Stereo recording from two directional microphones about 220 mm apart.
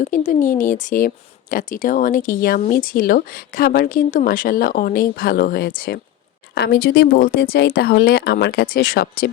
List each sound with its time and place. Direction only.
0.0 s speech: 35° left (ahead or behind)